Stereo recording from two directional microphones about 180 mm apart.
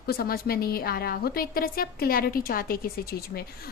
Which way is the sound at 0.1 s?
55° left (ahead or behind).